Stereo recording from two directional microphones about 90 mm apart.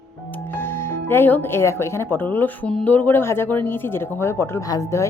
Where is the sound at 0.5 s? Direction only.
25° left (ahead or behind).